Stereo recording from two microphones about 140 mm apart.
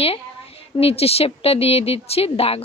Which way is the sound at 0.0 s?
45° left (ahead or behind).